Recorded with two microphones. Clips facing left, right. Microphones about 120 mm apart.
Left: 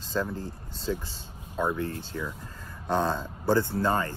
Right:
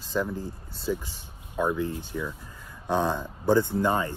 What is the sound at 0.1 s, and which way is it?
Speech, 15° right (ahead or behind).